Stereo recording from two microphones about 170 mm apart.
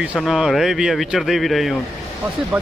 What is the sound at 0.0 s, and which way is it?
Speech, 5° right (ahead or behind).